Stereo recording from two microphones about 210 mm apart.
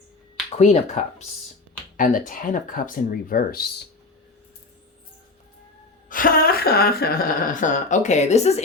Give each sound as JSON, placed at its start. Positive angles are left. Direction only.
{"t": 0.5, "sound": "speech", "side_deg": 30}
{"t": 2.0, "sound": "speech", "side_deg": 40}
{"t": 6.1, "sound": "speech", "side_deg": 40}